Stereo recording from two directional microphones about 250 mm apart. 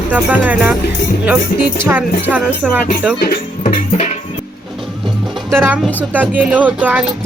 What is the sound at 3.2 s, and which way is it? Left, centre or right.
Music, left.